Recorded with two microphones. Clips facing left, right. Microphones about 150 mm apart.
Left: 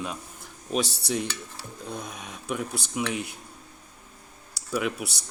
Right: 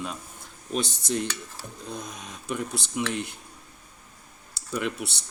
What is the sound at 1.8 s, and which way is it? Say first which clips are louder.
Speech: left 1 dB; 5° left (ahead or behind).